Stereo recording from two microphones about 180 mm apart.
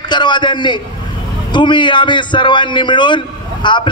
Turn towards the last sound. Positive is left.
turn(degrees=25)  # may be behind; listen again after turning